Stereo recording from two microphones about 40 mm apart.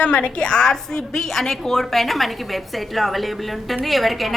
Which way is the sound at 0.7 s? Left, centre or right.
Centre.